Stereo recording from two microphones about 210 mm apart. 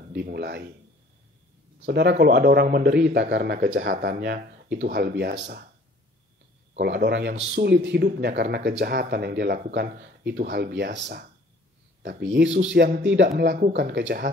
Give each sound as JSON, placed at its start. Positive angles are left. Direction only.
{"t": 0.1, "sound": "speech", "side_deg": -50}
{"t": 1.9, "sound": "speech", "side_deg": -50}
{"t": 3.5, "sound": "speech", "side_deg": -40}
{"t": 6.8, "sound": "speech", "side_deg": -50}
{"t": 12.0, "sound": "speech", "side_deg": -55}